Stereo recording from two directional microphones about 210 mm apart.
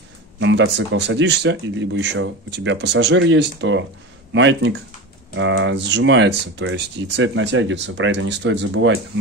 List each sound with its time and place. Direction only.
0.4 s speech: 60° right (ahead or behind)